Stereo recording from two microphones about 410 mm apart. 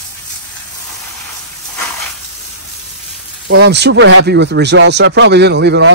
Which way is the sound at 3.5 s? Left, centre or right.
Right.